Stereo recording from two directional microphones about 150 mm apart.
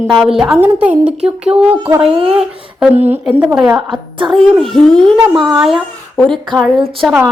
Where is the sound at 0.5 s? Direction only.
10° right (ahead or behind).